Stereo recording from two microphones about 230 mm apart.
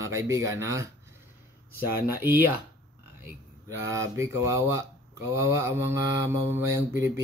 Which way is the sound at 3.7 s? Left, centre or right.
Centre.